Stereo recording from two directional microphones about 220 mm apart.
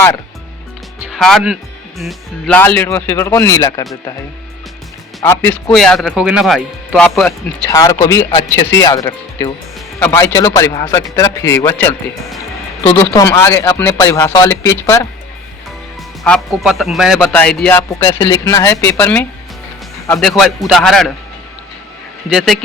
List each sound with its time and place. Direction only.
1.1 s speech: centre (ahead or behind)
5.2 s speech: 10° left (ahead or behind)
7.7 s speech: 15° left (ahead or behind)
16.2 s speech: centre (ahead or behind)
22.3 s speech: centre (ahead or behind)